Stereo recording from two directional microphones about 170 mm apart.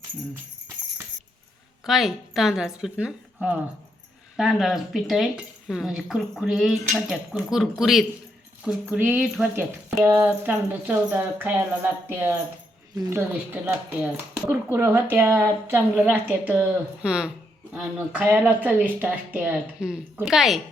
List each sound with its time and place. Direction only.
1.8 s a woman's voice: centre (ahead or behind)